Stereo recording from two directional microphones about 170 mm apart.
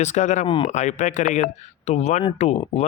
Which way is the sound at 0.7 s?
45° left (ahead or behind).